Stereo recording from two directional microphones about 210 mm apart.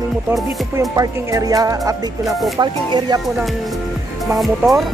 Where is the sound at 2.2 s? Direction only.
Centre (ahead or behind).